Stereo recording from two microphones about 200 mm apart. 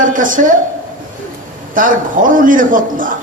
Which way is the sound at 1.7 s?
40° right (ahead or behind).